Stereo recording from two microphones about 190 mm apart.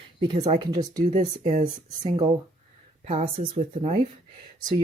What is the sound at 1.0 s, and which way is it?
Speech, 35° right (ahead or behind).